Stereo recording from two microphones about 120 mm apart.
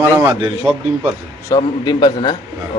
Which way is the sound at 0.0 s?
25° right (ahead or behind).